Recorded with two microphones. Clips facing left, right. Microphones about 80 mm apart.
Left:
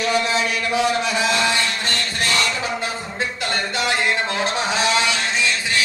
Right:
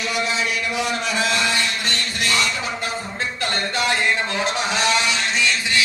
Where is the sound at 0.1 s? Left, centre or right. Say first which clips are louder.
Left 1 dB; left.